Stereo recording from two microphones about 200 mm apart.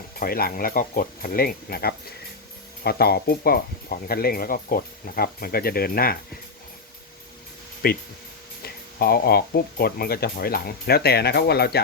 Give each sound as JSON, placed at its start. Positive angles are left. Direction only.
{"t": 0.2, "sound": "speech", "side_deg": 50}
{"t": 7.8, "sound": "speech", "side_deg": 50}